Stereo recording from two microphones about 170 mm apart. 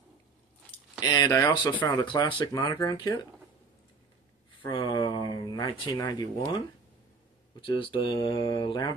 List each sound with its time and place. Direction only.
1.0 s speech: 20° left (ahead or behind)
4.6 s a sound: 30° left (ahead or behind)
7.6 s speech: 30° left (ahead or behind)